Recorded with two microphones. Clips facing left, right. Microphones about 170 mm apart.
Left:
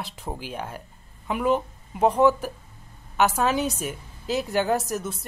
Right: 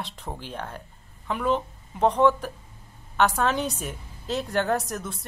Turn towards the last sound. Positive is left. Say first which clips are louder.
# left 2 dB
turn(degrees=5)  # may be behind; listen again after turning